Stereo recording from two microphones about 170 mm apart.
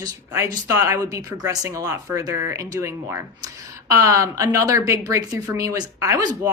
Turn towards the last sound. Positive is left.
turn(degrees=-20)  # may be behind; listen again after turning